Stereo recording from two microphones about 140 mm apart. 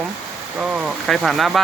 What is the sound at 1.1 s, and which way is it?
Speech, centre (ahead or behind).